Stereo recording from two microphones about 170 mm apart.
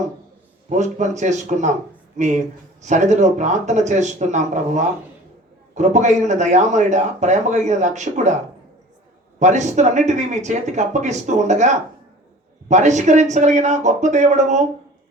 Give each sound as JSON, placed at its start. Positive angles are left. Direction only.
{"t": 0.7, "sound": "speech", "side_deg": -45}
{"t": 9.4, "sound": "speech", "side_deg": -45}